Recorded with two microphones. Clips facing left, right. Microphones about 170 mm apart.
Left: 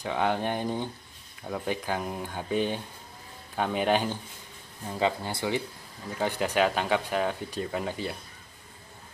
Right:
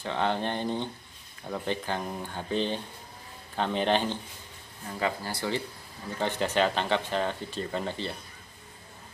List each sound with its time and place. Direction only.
0.0 s speech: 10° left (ahead or behind)
4.9 s speech: 20° left (ahead or behind)